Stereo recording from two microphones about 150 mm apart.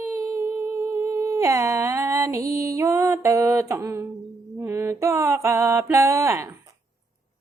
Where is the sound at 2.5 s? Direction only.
20° right (ahead or behind).